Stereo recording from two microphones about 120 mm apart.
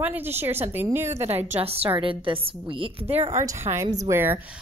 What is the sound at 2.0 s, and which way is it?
Speech, 45° right (ahead or behind).